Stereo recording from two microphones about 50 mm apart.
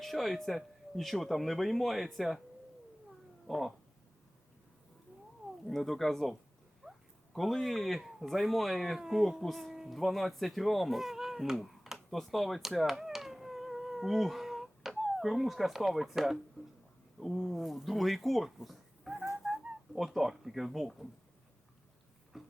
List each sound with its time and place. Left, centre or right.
0.0 s speech: centre
3.4 s speech: centre
5.6 s speech: centre
6.8 s a sound: right
7.3 s speech: centre
9.7 s music: centre
10.0 s speech: centre
12.1 s a sound: centre
17.2 s speech: centre
19.4 s a sound: centre
20.0 s speech: centre
22.3 s a sound: centre